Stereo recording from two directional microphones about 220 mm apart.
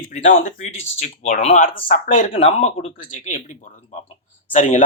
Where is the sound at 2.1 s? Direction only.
35° left (ahead or behind).